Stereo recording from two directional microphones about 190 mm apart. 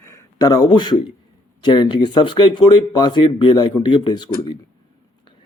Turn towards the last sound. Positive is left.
turn(degrees=25)  # may be behind; listen again after turning